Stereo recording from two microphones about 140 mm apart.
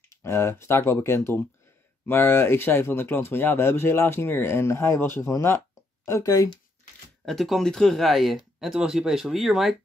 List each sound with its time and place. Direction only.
0.1 s speech: 20° left (ahead or behind)
7.2 s speech: centre (ahead or behind)